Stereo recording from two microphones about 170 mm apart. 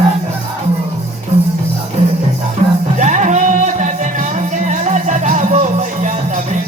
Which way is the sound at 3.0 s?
45° right (ahead or behind).